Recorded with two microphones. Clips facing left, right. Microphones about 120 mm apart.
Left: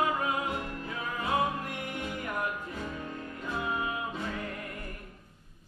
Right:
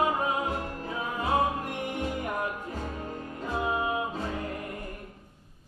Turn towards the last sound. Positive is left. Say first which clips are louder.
# right 4 dB
turn(degrees=-30)  # may be behind; listen again after turning